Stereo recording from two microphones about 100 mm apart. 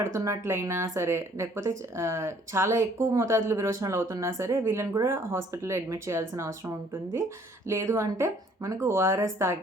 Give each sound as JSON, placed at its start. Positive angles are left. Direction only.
{"t": 0.0, "sound": "speech", "side_deg": -25}